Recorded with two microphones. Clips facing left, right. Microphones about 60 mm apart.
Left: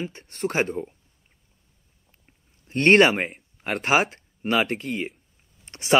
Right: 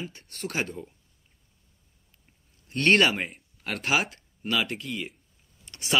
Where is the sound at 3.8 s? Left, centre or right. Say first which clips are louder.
Left 5 dB; left.